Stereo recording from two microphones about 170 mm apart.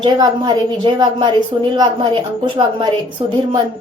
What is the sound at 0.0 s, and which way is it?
A woman's voice, 30° right (ahead or behind).